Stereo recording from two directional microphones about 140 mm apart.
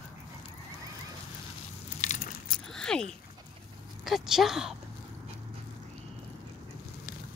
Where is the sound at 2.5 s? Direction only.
5° left (ahead or behind).